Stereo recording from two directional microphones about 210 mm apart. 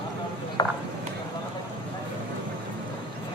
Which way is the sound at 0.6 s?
20° left (ahead or behind).